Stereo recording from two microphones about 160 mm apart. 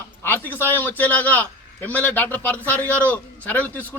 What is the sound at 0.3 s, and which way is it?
A man's voice, 10° left (ahead or behind).